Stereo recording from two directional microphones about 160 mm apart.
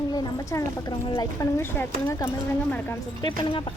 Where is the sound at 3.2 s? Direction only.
30° left (ahead or behind).